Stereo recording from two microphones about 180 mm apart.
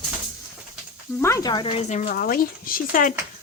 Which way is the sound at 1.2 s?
20° left (ahead or behind).